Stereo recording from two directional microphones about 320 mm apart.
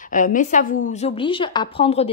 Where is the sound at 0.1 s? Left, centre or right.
Left.